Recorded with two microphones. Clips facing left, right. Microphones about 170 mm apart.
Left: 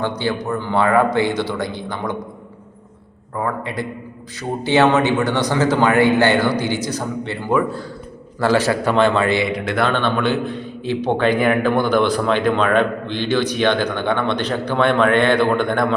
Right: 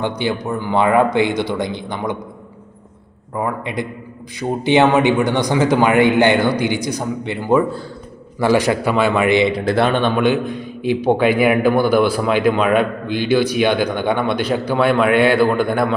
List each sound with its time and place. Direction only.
0.0 s a man's voice: 15° right (ahead or behind)
3.3 s a man's voice: 15° right (ahead or behind)
9.5 s a man's voice: 30° right (ahead or behind)
9.9 s a man's voice: 15° right (ahead or behind)